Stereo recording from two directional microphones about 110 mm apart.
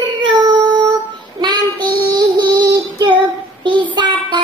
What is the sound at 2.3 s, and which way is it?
Music, 40° right (ahead or behind).